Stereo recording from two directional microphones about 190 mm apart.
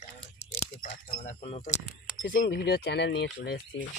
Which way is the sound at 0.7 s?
45° left (ahead or behind).